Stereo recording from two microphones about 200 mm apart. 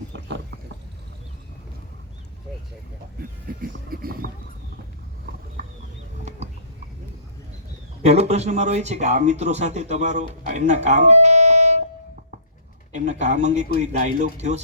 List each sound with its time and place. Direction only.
3.6 s a sound: 45° right (ahead or behind)
8.0 s a man's voice: 30° right (ahead or behind)
12.9 s a man's voice: 35° right (ahead or behind)